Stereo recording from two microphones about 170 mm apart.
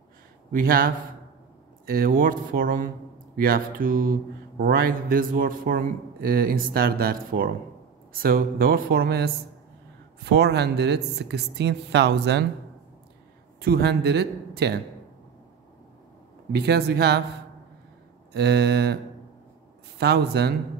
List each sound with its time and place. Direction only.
0.5 s speech: 60° right (ahead or behind); by 12.4 s 90° right
13.6 s a man's voice: 70° right (ahead or behind)
16.5 s speech: 70° right (ahead or behind)
18.3 s speech: 75° right (ahead or behind)
20.0 s speech: 75° right (ahead or behind)